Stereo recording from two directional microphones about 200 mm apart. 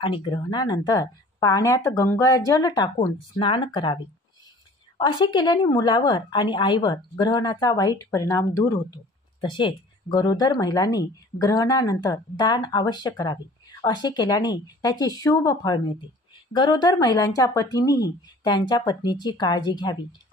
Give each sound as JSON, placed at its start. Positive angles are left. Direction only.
{"t": 0.0, "sound": "speech", "side_deg": 25}